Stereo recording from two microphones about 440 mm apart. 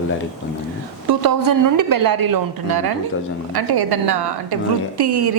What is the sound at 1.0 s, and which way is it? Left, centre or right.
A woman's voice, right.